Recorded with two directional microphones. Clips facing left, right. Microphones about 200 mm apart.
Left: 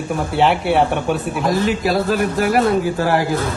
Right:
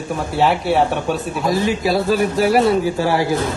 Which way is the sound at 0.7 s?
15° left (ahead or behind).